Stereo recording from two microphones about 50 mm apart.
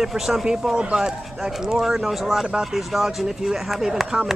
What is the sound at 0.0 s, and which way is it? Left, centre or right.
Speech, centre.